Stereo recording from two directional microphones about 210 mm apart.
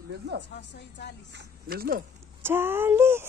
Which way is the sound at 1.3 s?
45° right (ahead or behind).